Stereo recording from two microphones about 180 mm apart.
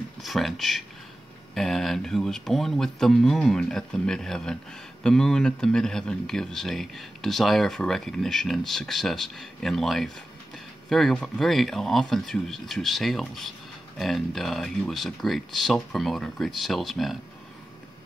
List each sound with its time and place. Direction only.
0.2 s speech: centre (ahead or behind)